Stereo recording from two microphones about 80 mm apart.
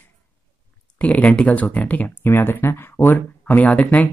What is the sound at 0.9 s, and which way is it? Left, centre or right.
A child's voice, centre.